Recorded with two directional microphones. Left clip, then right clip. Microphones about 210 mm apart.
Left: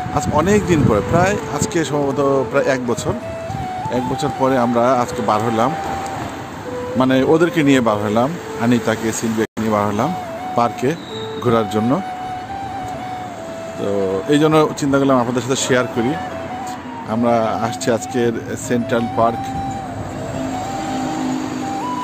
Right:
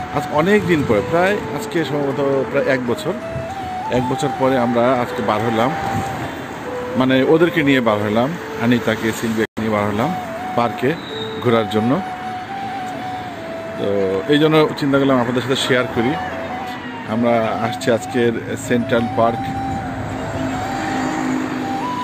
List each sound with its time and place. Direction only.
0.1 s speech: 10° left (ahead or behind)
4.4 s speech: 15° left (ahead or behind)
7.0 s speech: 10° left (ahead or behind)
14.3 s speech: 10° left (ahead or behind)